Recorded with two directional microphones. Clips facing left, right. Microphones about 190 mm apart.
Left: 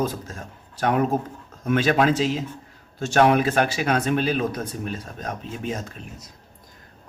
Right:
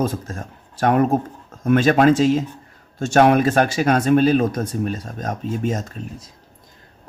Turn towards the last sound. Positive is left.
turn(degrees=-45)  # may be behind; listen again after turning